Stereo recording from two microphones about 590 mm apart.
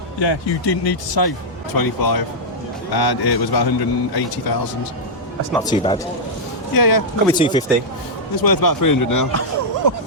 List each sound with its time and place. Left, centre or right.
0.2 s a man's voice: left
5.5 s speech: centre
6.7 s a man's voice: left
7.3 s speech: centre
8.4 s a man's voice: left
9.3 s a sound: right